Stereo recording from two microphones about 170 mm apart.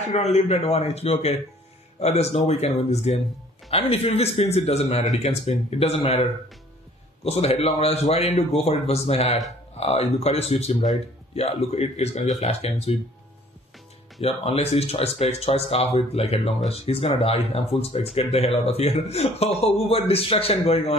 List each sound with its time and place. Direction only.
0.1 s speech: 40° left (ahead or behind)
7.2 s speech: 35° left (ahead or behind)
14.2 s speech: 35° left (ahead or behind)